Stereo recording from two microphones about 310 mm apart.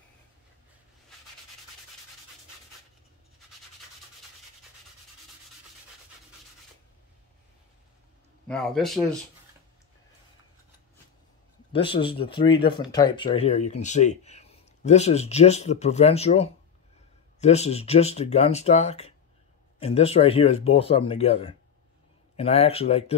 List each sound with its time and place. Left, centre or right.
8.5 s speech: centre
11.7 s a man's voice: centre